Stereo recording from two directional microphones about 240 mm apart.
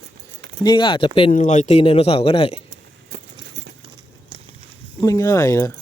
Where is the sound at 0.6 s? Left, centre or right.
Centre.